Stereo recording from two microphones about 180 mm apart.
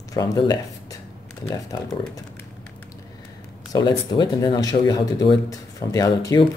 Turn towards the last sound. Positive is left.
turn(degrees=20)  # may be behind; listen again after turning